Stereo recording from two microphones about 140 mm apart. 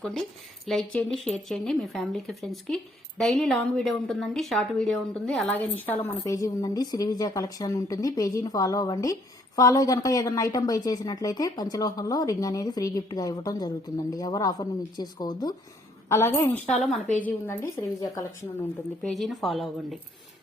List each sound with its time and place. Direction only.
0.6 s speech: centre (ahead or behind)
6.1 s a woman's voice: 25° left (ahead or behind)
19.0 s speech: centre (ahead or behind)